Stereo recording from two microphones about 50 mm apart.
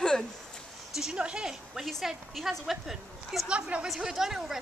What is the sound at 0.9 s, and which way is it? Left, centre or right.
Speech, centre.